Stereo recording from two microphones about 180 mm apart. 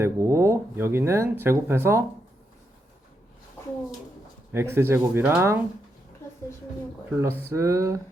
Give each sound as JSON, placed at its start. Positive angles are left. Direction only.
{"t": 0.0, "sound": "speech", "side_deg": -15}
{"t": 4.5, "sound": "speech", "side_deg": -15}
{"t": 7.1, "sound": "speech", "side_deg": -10}